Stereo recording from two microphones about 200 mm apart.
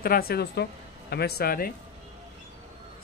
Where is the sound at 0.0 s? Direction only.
50° left (ahead or behind).